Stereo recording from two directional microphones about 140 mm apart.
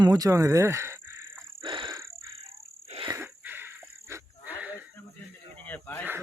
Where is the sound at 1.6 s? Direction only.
35° right (ahead or behind).